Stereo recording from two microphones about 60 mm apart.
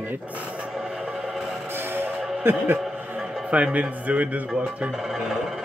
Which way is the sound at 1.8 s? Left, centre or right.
Right.